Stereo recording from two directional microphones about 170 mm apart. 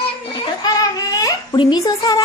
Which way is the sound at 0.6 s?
20° left (ahead or behind).